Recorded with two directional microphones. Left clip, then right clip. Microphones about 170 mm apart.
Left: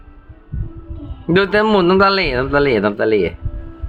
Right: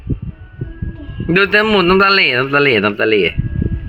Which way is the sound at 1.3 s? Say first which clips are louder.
Right 2 dB; 5° left (ahead or behind).